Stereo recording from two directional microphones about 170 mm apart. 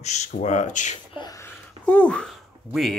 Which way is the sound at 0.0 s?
40° left (ahead or behind).